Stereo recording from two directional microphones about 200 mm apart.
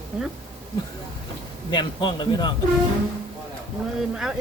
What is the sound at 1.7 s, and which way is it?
Speech, 20° left (ahead or behind).